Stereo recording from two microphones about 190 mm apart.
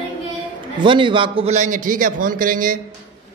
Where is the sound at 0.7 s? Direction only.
25° right (ahead or behind); by 2.8 s 45° right (ahead or behind).